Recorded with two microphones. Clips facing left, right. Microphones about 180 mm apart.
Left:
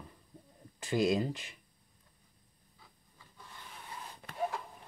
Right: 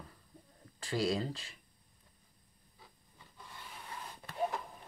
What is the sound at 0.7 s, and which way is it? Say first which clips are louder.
Speech: left 4 dB; 20° left (ahead or behind).